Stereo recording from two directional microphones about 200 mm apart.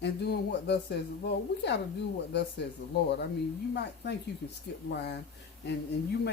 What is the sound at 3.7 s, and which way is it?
Speech, 55° left (ahead or behind).